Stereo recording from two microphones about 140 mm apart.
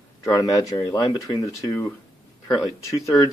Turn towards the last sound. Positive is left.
turn(degrees=25)  # may be behind; listen again after turning